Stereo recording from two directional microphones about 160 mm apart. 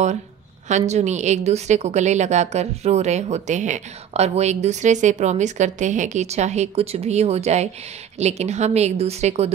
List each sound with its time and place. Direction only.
0.7 s a woman's voice: 45° right (ahead or behind)